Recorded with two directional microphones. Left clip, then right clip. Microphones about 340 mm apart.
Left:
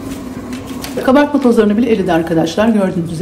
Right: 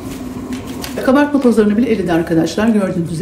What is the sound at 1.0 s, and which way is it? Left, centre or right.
Speech, centre.